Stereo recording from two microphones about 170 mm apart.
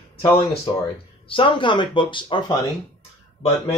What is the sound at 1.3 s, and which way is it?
Speech, 30° left (ahead or behind).